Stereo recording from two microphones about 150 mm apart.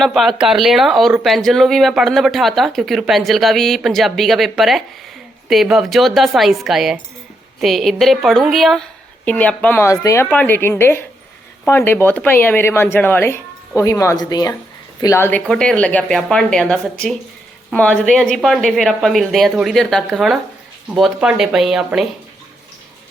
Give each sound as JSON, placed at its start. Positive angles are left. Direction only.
{"t": 0.0, "sound": "speech", "side_deg": 0}
{"t": 10.2, "sound": "a woman's voice", "side_deg": 10}